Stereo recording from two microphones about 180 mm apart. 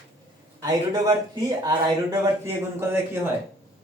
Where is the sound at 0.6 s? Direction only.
20° right (ahead or behind).